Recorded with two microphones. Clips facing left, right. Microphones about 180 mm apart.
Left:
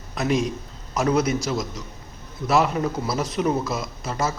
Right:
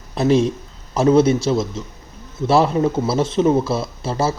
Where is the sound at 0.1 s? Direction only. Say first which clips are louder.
Right 7 dB; 30° right (ahead or behind).